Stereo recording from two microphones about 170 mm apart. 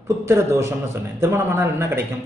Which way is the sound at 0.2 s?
15° right (ahead or behind).